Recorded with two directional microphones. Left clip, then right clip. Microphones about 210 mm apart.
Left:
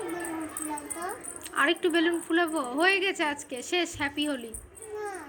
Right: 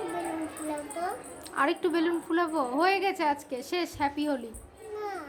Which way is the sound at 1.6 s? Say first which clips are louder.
Left 2 dB; 5° right (ahead or behind).